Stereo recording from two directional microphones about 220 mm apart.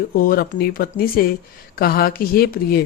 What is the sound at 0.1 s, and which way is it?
Speech, 40° left (ahead or behind).